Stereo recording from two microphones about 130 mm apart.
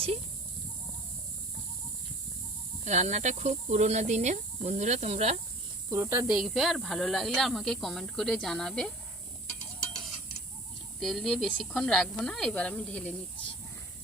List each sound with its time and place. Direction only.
2.8 s speech: 60° right (ahead or behind)
5.9 s speech: 20° right (ahead or behind)
6.4 s speech: centre (ahead or behind)
11.0 s speech: centre (ahead or behind)